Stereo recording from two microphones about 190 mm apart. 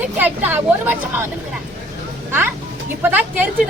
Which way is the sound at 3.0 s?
10° right (ahead or behind).